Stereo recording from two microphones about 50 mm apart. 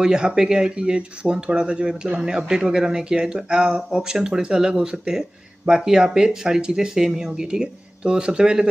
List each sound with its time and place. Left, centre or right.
0.0 s speech: centre